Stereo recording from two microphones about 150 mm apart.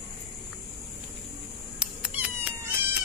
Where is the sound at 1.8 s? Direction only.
5° right (ahead or behind).